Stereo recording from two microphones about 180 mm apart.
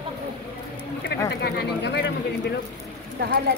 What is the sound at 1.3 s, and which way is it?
Speech, 65° left (ahead or behind).